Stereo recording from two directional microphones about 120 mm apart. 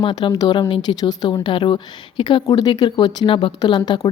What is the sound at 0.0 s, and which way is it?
Speech, 40° left (ahead or behind).